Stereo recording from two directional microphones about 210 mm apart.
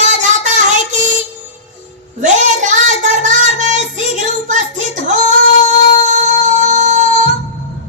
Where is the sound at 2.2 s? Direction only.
35° right (ahead or behind).